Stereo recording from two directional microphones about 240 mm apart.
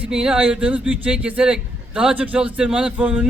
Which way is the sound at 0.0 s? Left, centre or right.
Centre.